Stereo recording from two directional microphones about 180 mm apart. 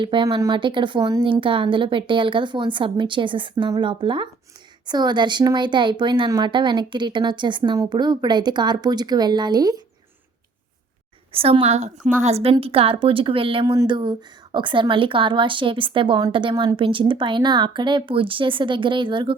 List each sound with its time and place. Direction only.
0.0 s speech: 25° right (ahead or behind)
11.3 s a woman's voice: 30° right (ahead or behind)